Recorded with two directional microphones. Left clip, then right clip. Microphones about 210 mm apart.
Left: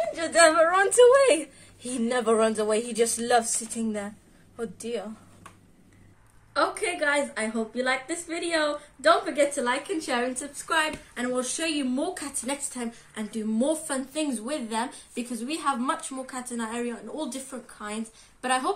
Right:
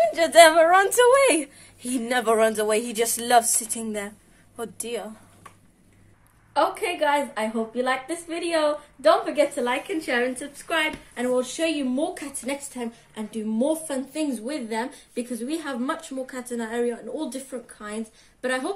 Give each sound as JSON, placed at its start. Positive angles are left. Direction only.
{"t": 0.1, "sound": "speech", "side_deg": -50}
{"t": 6.5, "sound": "a woman's voice", "side_deg": 15}
{"t": 18.4, "sound": "a woman's voice", "side_deg": 15}